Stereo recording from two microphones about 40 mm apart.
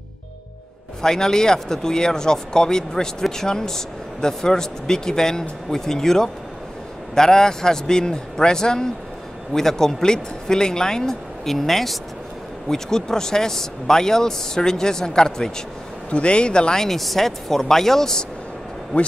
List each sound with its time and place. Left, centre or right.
1.0 s speech: centre
16.1 s a man's voice: left
16.8 s speech: centre
18.9 s speech: left